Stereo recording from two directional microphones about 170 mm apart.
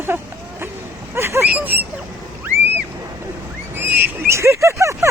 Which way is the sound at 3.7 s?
10° right (ahead or behind).